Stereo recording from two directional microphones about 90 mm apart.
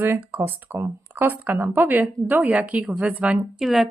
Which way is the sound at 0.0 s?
25° right (ahead or behind).